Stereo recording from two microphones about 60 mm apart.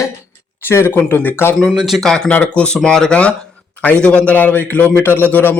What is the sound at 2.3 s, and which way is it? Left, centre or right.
Speech, left.